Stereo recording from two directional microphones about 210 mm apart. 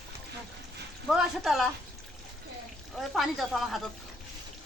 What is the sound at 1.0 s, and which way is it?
Speech, centre (ahead or behind).